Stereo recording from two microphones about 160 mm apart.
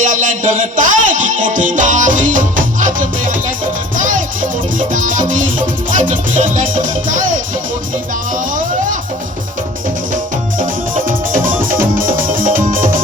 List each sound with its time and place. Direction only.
0.0 s music: 55° right (ahead or behind)
10.6 s music: 55° right (ahead or behind)